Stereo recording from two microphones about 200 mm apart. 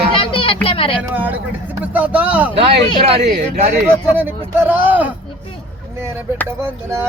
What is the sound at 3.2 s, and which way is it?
Speech, 50° right (ahead or behind).